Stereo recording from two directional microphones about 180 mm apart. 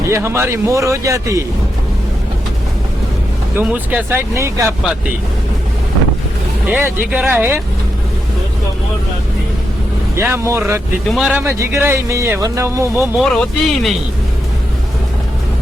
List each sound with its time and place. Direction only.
0.1 s speech: 15° right (ahead or behind)
3.6 s speech: 10° right (ahead or behind)
6.7 s speech: 10° right (ahead or behind)
10.2 s speech: 15° right (ahead or behind)
13.1 s speech: centre (ahead or behind)